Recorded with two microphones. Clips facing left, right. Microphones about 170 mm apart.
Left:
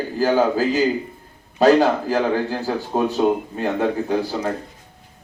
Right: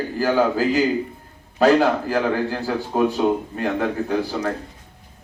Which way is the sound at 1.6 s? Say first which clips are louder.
Left 1 dB; 10° left (ahead or behind).